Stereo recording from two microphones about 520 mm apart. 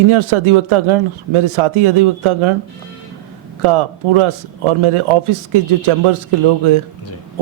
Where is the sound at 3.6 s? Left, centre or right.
Right.